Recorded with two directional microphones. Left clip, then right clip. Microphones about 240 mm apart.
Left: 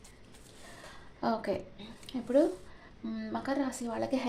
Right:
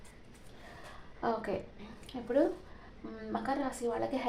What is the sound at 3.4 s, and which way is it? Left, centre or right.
Speech, left.